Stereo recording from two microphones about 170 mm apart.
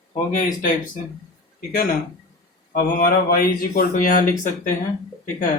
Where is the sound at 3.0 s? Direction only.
60° left (ahead or behind).